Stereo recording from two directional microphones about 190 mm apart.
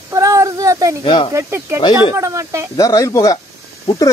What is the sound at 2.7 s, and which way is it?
Speech, 15° left (ahead or behind).